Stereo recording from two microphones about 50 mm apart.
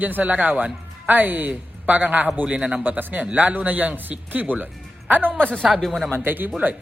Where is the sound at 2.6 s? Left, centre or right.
Centre.